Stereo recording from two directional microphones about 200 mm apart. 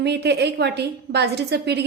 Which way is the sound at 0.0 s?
55° right (ahead or behind).